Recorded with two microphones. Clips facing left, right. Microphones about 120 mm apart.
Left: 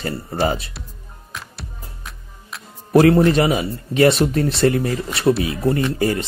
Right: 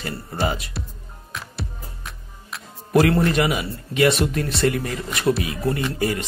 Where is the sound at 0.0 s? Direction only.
35° left (ahead or behind).